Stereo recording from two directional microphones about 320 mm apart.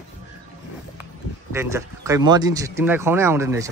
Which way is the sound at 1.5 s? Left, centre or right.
Centre.